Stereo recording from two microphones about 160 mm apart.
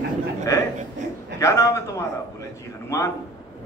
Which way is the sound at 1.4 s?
20° left (ahead or behind).